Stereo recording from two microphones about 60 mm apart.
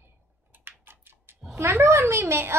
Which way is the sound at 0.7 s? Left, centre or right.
Right.